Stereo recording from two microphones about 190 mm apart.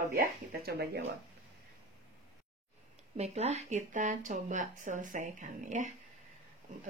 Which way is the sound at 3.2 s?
35° right (ahead or behind).